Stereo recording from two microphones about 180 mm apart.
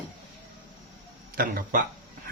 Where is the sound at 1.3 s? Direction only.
55° right (ahead or behind).